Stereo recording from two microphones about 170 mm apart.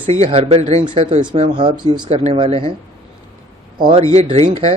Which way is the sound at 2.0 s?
35° right (ahead or behind).